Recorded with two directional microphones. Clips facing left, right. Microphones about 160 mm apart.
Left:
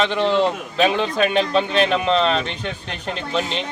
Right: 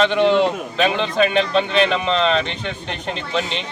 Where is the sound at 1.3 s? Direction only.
40° left (ahead or behind).